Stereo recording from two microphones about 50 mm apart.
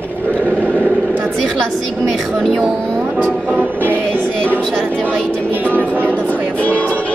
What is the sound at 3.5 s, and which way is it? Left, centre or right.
Music, right.